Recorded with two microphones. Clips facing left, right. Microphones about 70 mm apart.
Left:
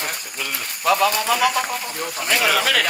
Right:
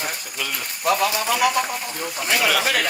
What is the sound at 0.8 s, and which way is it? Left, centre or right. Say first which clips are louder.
Speech: left 2 dB; left.